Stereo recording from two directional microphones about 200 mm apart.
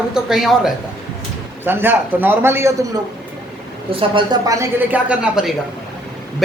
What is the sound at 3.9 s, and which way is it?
A woman's voice, 25° right (ahead or behind).